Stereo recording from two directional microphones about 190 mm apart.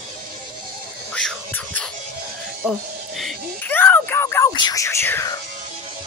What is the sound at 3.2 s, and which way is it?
Music, 5° left (ahead or behind).